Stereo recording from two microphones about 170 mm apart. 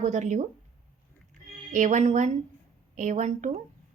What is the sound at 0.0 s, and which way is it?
Speech, 45° right (ahead or behind).